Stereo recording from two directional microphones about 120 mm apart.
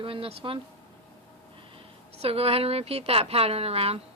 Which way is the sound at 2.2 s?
55° right (ahead or behind).